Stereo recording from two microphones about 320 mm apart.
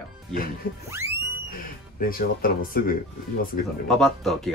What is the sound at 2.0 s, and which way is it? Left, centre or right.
Speech, left.